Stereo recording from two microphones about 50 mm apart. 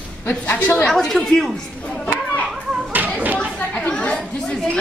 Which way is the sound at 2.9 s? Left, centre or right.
Right.